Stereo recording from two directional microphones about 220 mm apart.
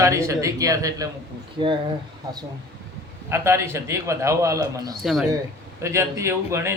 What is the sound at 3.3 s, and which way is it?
A man's voice, 10° right (ahead or behind).